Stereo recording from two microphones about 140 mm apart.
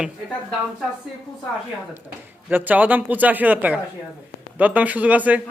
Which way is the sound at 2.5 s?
10° right (ahead or behind).